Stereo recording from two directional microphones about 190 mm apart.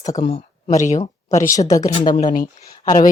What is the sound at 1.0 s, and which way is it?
A woman's voice, 15° left (ahead or behind).